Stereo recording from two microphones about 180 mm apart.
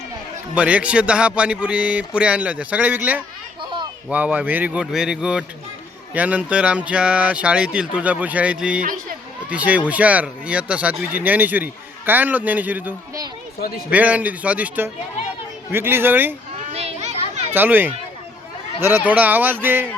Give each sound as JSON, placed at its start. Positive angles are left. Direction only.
{"t": 0.5, "sound": "a man's voice", "side_deg": -5}
{"t": 3.6, "sound": "children playing", "side_deg": -25}
{"t": 4.1, "sound": "a man's voice", "side_deg": -10}
{"t": 8.8, "sound": "speech", "side_deg": -50}
{"t": 9.5, "sound": "a man's voice", "side_deg": -10}
{"t": 16.7, "sound": "children playing", "side_deg": -35}
{"t": 17.5, "sound": "a man's voice", "side_deg": -10}